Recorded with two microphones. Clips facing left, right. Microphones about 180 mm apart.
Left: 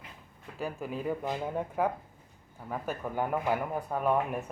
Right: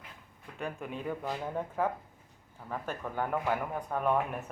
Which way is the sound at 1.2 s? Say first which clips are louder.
Left 2 dB; 15° left (ahead or behind).